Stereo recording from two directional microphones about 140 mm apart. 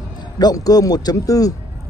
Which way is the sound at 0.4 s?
25° left (ahead or behind).